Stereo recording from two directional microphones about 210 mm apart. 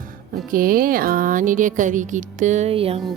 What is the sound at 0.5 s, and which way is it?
A woman's voice, 40° right (ahead or behind).